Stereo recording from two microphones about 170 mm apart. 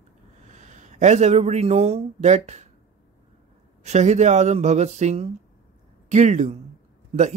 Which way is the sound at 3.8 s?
40° right (ahead or behind).